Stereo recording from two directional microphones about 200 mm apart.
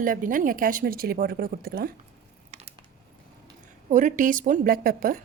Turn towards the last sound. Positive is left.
turn(degrees=-45)  # may be behind; listen again after turning